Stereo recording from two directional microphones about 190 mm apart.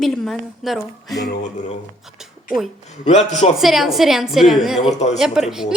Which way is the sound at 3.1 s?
35° left (ahead or behind).